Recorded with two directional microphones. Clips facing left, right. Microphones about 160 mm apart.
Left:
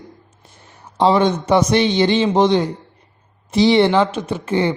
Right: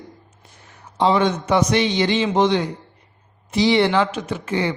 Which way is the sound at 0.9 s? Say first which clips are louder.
Left 3 dB; 35° left (ahead or behind).